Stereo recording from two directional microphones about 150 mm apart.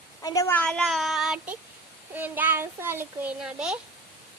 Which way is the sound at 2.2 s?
10° right (ahead or behind).